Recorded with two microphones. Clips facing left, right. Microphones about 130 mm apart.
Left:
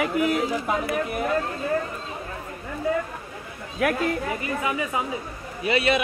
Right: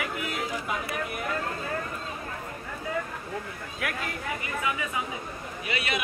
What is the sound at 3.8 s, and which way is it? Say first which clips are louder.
Speech: left 10 dB; 30° left (ahead or behind).